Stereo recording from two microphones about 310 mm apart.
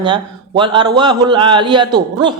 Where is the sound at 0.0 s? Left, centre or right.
Centre.